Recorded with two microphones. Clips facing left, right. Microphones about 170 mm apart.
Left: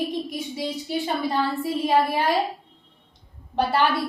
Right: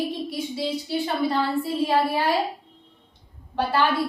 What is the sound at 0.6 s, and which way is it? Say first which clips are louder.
Speech: right 1 dB; 20° left (ahead or behind).